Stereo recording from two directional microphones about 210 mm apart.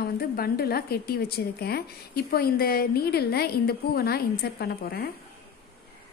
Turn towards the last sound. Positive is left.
turn(degrees=50)  # may be behind; listen again after turning